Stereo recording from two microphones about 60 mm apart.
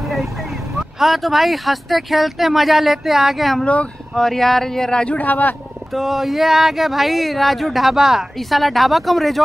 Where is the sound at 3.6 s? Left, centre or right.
Centre.